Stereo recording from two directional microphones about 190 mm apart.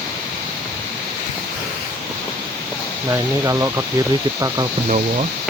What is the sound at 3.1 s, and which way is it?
Speech, 15° right (ahead or behind).